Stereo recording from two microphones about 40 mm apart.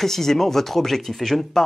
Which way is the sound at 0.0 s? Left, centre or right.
Centre.